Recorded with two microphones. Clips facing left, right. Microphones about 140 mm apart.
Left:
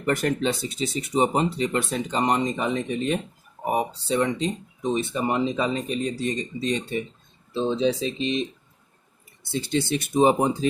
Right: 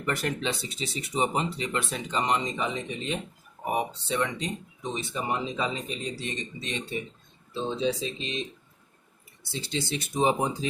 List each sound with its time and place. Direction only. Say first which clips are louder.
0.0 s speech: left 6 dB; 45° left (ahead or behind)
3.7 s speech: left 4 dB; 35° left (ahead or behind)
4.8 s speech: left 8 dB; 50° left (ahead or behind); by 6.8 s 35° left (ahead or behind)
7.8 s speech: left 5 dB; 65° left (ahead or behind)
9.4 s speech: left 7 dB; 55° left (ahead or behind)